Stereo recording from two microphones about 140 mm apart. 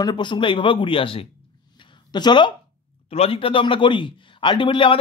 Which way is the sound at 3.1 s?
45° left (ahead or behind).